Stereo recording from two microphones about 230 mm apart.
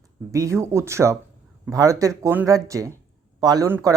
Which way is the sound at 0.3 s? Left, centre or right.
Centre.